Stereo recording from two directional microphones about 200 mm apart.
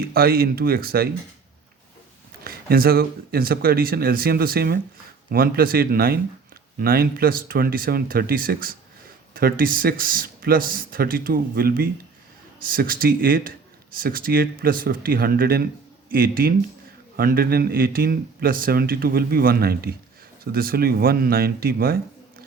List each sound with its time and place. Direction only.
0.0 s a man's voice: 50° right (ahead or behind)
2.4 s a man's voice: 50° right (ahead or behind)